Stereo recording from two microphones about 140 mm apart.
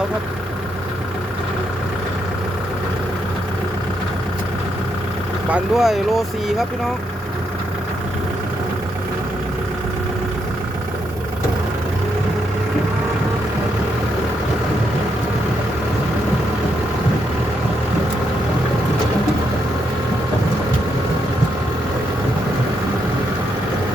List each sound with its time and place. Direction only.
5.5 s speech: centre (ahead or behind)